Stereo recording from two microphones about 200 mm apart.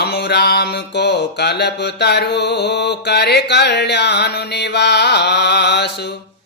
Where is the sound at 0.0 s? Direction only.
60° left (ahead or behind).